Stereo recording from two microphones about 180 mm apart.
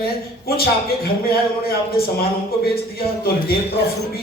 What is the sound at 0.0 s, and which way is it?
Speech, 60° left (ahead or behind).